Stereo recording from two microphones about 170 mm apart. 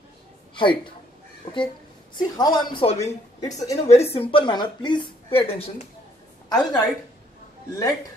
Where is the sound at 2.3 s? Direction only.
25° left (ahead or behind).